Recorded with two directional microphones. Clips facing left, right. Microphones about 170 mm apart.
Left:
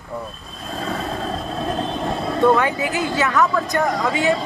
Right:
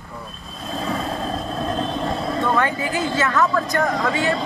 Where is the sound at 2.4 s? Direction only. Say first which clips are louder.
Left 6 dB; 15° left (ahead or behind).